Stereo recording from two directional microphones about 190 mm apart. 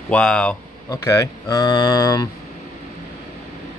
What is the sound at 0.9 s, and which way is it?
A man's voice, 15° left (ahead or behind).